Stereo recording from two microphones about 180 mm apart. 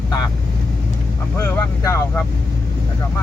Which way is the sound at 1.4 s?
15° left (ahead or behind).